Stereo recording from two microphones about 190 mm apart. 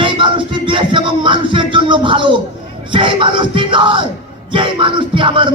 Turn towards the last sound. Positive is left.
turn(degrees=-25)  # may be behind; listen again after turning